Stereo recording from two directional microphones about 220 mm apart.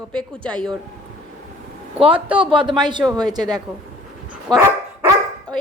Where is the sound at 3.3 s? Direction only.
20° right (ahead or behind).